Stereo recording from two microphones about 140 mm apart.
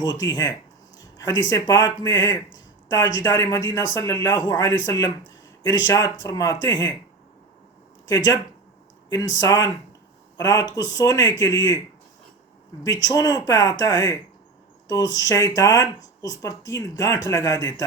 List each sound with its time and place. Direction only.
0.0 s speech: 30° left (ahead or behind)
8.0 s speech: 25° left (ahead or behind)
12.8 s speech: 25° left (ahead or behind)